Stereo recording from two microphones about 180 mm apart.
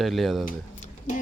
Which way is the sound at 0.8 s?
45° left (ahead or behind).